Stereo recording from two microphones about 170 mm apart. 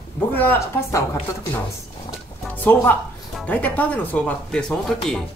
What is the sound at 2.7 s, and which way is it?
Speech, 10° left (ahead or behind).